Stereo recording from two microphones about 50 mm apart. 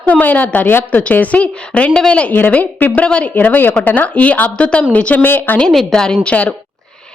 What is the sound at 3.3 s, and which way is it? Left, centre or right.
A woman's voice, left.